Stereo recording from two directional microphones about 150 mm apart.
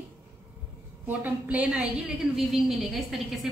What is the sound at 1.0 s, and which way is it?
A woman's voice, 10° right (ahead or behind).